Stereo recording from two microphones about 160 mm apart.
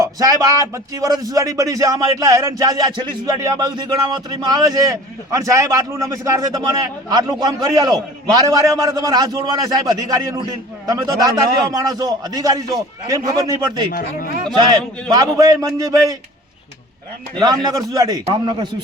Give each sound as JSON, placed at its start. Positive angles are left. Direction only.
{"t": 0.0, "sound": "speech", "side_deg": -20}
{"t": 14.6, "sound": "speech", "side_deg": -25}
{"t": 17.3, "sound": "speech", "side_deg": -25}